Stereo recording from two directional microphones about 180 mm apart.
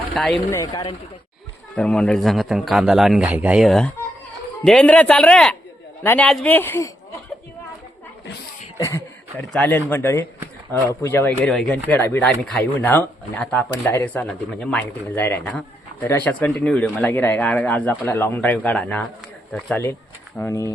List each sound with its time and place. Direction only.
0.1 s speech: 5° left (ahead or behind)
0.5 s speech: 20° left (ahead or behind)
1.7 s a man's voice: 5° left (ahead or behind)
8.8 s speech: 15° left (ahead or behind)
9.4 s speech: 5° left (ahead or behind)